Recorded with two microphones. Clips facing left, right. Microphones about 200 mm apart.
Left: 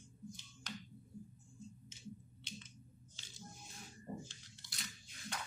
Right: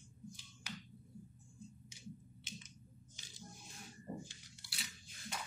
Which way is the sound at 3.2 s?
15° right (ahead or behind).